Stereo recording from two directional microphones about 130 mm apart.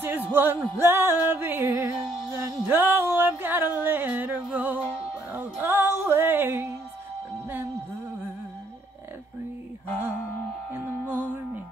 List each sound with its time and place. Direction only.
0.0 s music: 15° right (ahead or behind)
10.7 s music: 15° right (ahead or behind)